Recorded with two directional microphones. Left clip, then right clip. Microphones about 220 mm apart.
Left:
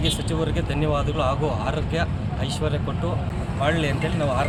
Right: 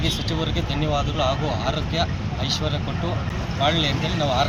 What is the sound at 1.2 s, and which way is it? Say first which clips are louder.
Speech: even; 25° left (ahead or behind).